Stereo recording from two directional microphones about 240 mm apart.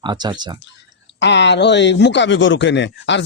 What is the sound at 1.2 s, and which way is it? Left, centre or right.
Speech, left.